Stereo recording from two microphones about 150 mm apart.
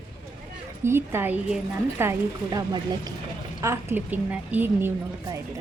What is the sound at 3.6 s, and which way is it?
A woman's voice, 15° right (ahead or behind).